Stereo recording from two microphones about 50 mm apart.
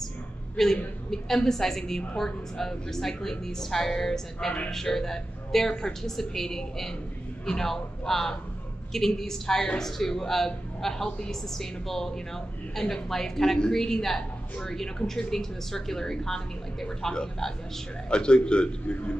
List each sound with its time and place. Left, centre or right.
1.1 s a woman's voice: centre